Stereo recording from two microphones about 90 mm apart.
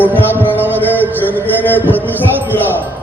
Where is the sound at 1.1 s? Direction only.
20° right (ahead or behind).